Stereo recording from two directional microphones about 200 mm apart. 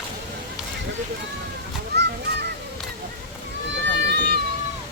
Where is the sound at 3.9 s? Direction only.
55° right (ahead or behind).